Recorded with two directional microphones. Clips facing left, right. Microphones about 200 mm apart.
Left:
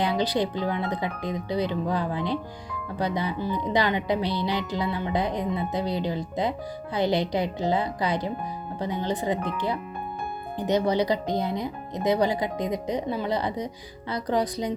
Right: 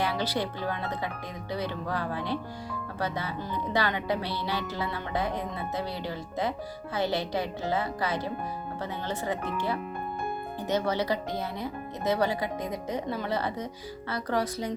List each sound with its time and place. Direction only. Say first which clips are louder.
0.0 s speech: left 5 dB; 15° left (ahead or behind)